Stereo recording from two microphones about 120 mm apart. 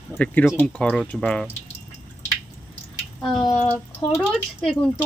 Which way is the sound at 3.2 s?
Centre (ahead or behind).